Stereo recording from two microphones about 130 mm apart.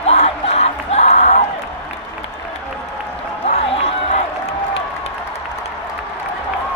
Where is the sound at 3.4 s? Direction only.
55° left (ahead or behind).